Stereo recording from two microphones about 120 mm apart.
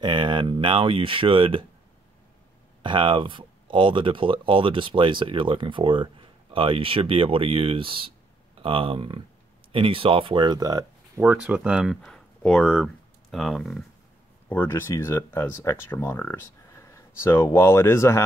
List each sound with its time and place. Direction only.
0.0 s speech: 40° right (ahead or behind)
2.8 s speech: 40° right (ahead or behind)
11.1 s speech: 10° right (ahead or behind)
12.0 s speech: 5° left (ahead or behind)
14.5 s speech: 15° left (ahead or behind)